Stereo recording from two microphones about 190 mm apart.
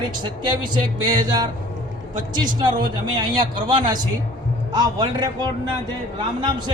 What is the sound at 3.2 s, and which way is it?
Speech, 25° right (ahead or behind).